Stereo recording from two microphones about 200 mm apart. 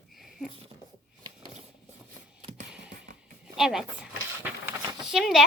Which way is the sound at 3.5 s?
Centre (ahead or behind).